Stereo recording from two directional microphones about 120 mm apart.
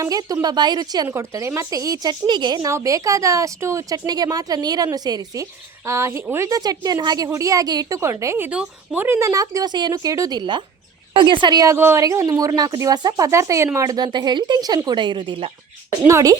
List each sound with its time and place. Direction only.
0.0 s speech: 30° right (ahead or behind)
1.0 s a woman's voice: 20° right (ahead or behind)
8.4 s speech: 10° right (ahead or behind)
9.0 s a woman's voice: 25° right (ahead or behind); by 15.4 s 45° right (ahead or behind)
16.0 s a woman's voice: 25° right (ahead or behind)